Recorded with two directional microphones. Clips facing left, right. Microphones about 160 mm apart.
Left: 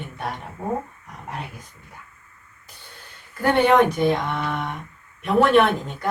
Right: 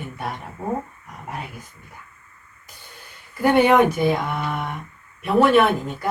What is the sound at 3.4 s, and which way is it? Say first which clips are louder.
Speech: right 1 dB; 10° right (ahead or behind).